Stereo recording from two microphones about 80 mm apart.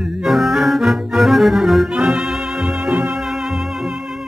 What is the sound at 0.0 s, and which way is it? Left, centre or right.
Music, centre.